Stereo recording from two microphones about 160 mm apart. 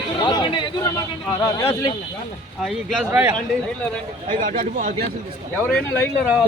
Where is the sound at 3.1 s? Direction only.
15° right (ahead or behind).